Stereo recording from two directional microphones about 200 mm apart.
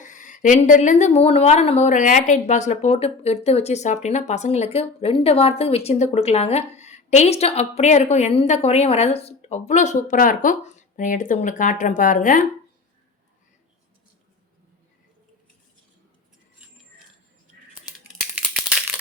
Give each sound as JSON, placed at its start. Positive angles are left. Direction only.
{"t": 0.0, "sound": "a woman's voice", "side_deg": 40}
{"t": 18.3, "sound": "crumpling", "side_deg": -5}